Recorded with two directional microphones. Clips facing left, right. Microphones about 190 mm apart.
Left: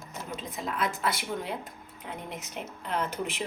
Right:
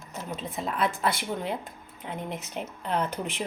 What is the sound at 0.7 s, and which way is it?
Speech, 30° right (ahead or behind).